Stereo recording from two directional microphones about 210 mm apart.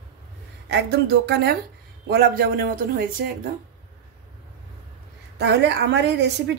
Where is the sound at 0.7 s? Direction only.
55° right (ahead or behind).